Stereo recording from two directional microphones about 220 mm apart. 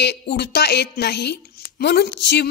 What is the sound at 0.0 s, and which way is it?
A woman's voice, 50° left (ahead or behind).